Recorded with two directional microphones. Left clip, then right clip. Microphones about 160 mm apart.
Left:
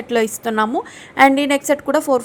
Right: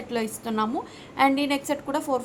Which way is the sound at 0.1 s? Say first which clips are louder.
Left 11 dB; 35° left (ahead or behind).